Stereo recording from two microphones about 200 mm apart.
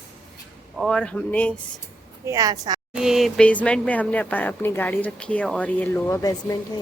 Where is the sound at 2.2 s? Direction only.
15° right (ahead or behind).